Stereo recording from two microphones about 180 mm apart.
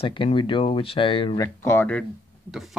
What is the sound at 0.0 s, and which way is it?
Speech, 30° left (ahead or behind).